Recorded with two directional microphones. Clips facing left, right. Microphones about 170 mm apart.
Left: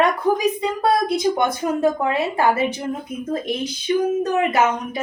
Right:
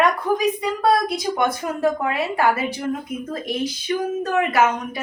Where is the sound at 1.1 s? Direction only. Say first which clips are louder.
Left 3 dB; 25° left (ahead or behind).